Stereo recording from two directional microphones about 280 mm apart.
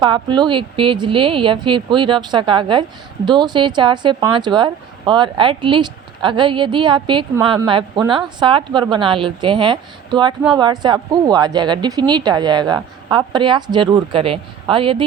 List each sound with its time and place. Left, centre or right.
0.0 s speech: centre